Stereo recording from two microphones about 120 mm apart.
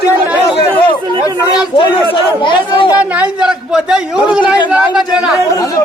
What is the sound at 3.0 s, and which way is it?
A man's voice, 10° right (ahead or behind).